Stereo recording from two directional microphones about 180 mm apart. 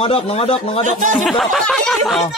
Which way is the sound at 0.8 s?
45° right (ahead or behind).